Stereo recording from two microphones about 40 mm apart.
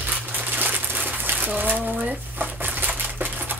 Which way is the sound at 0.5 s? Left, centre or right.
Right.